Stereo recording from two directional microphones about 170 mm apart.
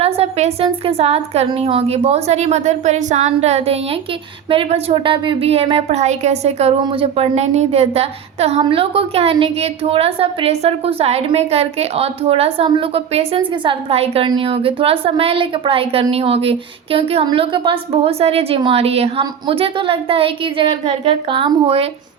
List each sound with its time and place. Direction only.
0.0 s a woman's voice: 40° right (ahead or behind)